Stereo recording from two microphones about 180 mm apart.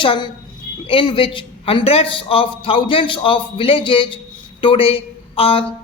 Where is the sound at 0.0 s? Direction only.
25° left (ahead or behind).